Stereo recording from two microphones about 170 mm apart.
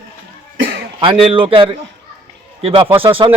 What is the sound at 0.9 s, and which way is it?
A man's voice, 30° right (ahead or behind).